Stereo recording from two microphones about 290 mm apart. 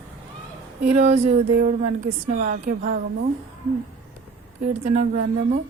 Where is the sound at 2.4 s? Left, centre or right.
Right.